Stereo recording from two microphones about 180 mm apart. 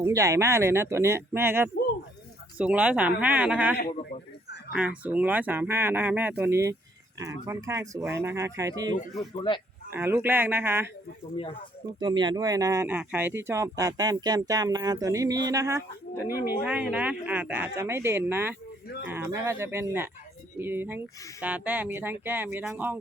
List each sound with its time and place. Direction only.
0.0 s speech: 15° right (ahead or behind)
9.3 s speech: 25° left (ahead or behind)
9.9 s speech: 10° right (ahead or behind)
11.9 s speech: 25° right (ahead or behind)